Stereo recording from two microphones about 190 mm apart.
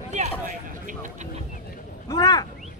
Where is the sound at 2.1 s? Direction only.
20° left (ahead or behind).